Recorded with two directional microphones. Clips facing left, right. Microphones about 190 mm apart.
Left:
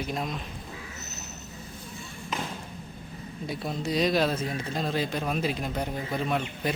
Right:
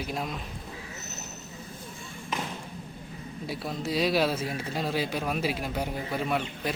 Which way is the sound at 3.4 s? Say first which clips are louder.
Left 1 dB; centre (ahead or behind).